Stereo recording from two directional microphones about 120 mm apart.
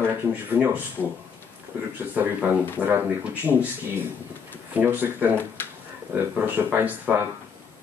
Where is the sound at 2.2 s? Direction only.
15° right (ahead or behind).